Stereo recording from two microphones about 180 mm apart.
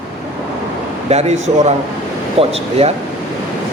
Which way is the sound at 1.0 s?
35° right (ahead or behind).